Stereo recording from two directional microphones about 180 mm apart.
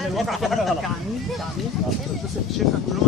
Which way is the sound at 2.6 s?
Centre (ahead or behind).